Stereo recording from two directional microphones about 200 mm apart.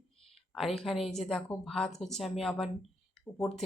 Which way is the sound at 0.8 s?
Centre (ahead or behind).